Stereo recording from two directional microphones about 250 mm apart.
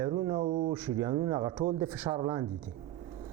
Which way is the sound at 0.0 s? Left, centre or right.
Right.